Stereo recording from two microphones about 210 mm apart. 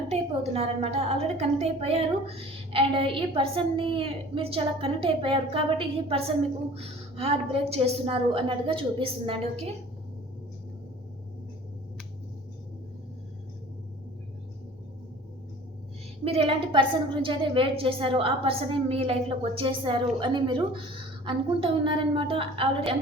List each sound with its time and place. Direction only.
0.1 s a woman's voice: 30° right (ahead or behind)
16.2 s a woman's voice: 25° right (ahead or behind)